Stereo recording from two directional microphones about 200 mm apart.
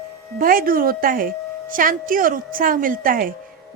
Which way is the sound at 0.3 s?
45° right (ahead or behind).